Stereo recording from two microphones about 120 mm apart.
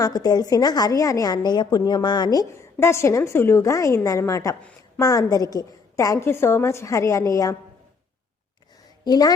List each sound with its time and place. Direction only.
0.0 s a woman's voice: 35° left (ahead or behind)
9.0 s a woman's voice: 35° left (ahead or behind)